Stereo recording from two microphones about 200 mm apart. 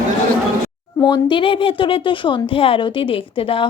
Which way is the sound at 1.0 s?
25° left (ahead or behind).